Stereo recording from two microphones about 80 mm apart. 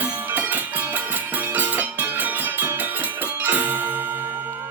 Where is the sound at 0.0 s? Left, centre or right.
Right.